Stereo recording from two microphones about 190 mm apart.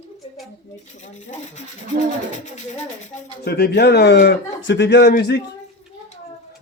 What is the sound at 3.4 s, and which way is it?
A man's voice, 55° left (ahead or behind).